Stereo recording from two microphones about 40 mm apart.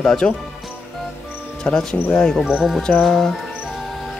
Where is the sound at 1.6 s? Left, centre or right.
Left.